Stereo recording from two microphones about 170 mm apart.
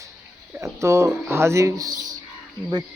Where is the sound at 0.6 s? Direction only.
15° right (ahead or behind).